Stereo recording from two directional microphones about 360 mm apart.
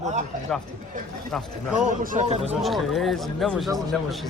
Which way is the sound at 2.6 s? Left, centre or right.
Centre.